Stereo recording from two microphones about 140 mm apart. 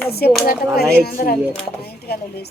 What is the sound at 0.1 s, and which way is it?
A woman's voice, 90° left.